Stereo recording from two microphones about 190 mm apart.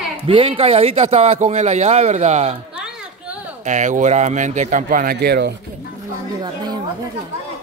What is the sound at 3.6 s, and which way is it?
Speech, 40° right (ahead or behind).